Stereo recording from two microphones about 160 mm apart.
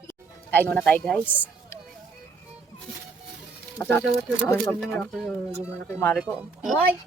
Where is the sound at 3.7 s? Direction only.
15° left (ahead or behind).